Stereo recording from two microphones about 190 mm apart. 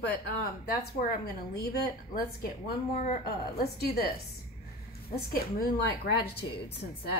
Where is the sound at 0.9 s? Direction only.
55° left (ahead or behind).